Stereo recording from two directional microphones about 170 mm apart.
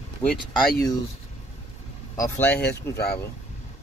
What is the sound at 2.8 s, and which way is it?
Speech, 15° left (ahead or behind).